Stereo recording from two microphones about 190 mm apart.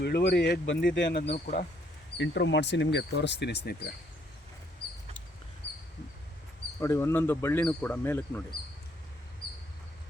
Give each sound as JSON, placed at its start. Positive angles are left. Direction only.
{"t": 0.0, "sound": "speech", "side_deg": 60}
{"t": 1.3, "sound": "speech", "side_deg": 40}
{"t": 2.1, "sound": "speech", "side_deg": 70}
{"t": 6.7, "sound": "speech", "side_deg": 15}